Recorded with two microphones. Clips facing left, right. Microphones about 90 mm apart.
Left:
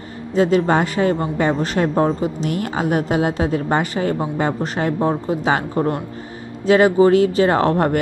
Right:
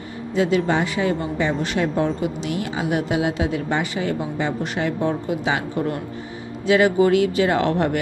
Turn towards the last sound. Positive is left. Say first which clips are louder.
# left 3 dB
turn(degrees=40)  # may be behind; listen again after turning